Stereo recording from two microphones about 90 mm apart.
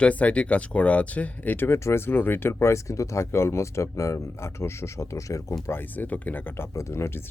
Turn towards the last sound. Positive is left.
turn(degrees=30)  # may be behind; listen again after turning